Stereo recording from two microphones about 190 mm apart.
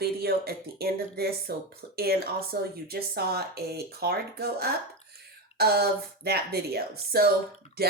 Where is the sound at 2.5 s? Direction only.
50° right (ahead or behind).